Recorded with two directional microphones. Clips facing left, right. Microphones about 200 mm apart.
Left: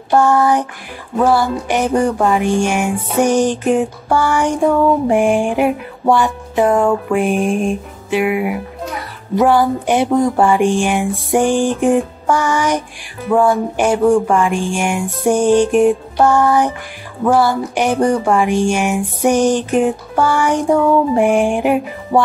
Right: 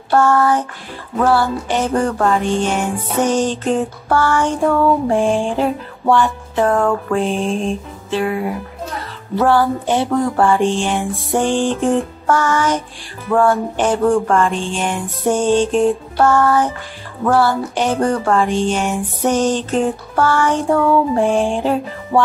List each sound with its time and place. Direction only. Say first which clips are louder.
0.1 s music: left 1 dB; 15° left (ahead or behind)